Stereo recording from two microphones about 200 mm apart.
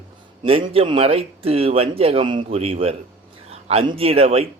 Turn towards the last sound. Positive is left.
turn(degrees=-30)  # may be behind; listen again after turning